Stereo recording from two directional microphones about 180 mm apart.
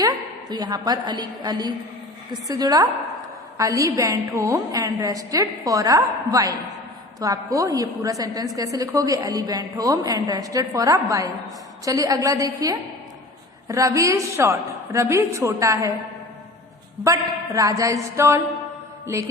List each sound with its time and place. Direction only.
0.0 s a woman's voice: 20° right (ahead or behind)
17.0 s a woman's voice: 15° right (ahead or behind)